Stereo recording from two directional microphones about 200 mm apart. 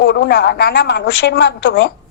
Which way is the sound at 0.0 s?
55° left (ahead or behind).